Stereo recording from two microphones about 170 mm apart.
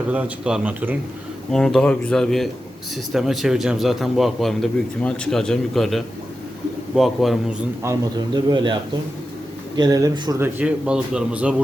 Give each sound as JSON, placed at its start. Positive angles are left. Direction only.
{"t": 0.1, "sound": "a man's voice", "side_deg": -5}
{"t": 1.5, "sound": "a man's voice", "side_deg": 5}
{"t": 7.9, "sound": "a man's voice", "side_deg": -20}
{"t": 9.7, "sound": "a man's voice", "side_deg": -20}